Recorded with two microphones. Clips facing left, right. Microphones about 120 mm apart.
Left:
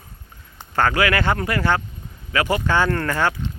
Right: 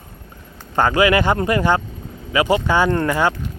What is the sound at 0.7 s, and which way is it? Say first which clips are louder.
Speech: right 4 dB; 20° right (ahead or behind).